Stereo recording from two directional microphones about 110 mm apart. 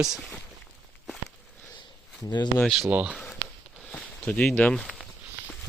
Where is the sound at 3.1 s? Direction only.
Centre (ahead or behind).